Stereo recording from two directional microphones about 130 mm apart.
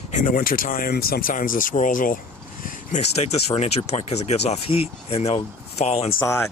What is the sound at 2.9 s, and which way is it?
Speech, 60° left (ahead or behind).